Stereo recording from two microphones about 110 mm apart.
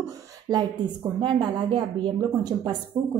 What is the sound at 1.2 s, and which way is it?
A woman's voice, 45° right (ahead or behind).